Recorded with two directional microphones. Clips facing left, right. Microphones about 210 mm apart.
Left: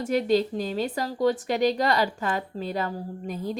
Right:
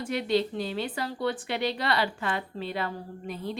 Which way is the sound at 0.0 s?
40° left (ahead or behind).